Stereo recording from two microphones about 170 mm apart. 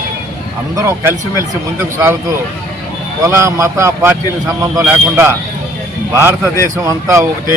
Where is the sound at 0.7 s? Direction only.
15° right (ahead or behind).